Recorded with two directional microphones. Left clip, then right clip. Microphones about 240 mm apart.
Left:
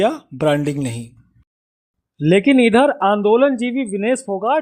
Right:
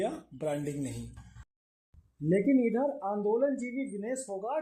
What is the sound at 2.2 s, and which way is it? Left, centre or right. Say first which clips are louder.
Speech: left 14 dB; left.